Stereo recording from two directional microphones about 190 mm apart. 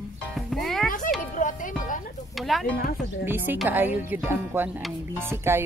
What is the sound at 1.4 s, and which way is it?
Music, 45° left (ahead or behind).